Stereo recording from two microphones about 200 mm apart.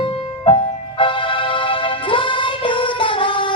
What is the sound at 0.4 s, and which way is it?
Music, 25° left (ahead or behind).